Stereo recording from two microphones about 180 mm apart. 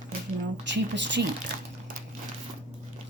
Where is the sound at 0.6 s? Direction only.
80° right.